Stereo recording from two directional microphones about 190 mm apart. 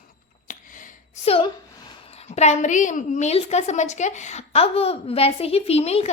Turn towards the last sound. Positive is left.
turn(degrees=35)  # may be behind; listen again after turning